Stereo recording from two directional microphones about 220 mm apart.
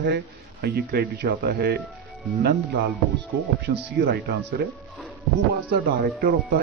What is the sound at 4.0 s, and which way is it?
Speech, 45° right (ahead or behind).